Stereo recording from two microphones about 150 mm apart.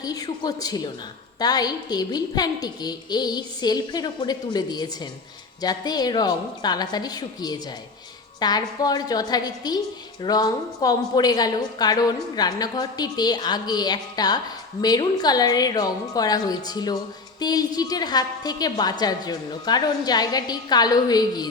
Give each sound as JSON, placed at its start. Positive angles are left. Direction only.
{"t": 0.0, "sound": "a woman's voice", "side_deg": 25}